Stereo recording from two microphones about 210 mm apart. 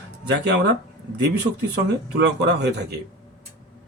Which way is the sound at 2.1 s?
55° right (ahead or behind).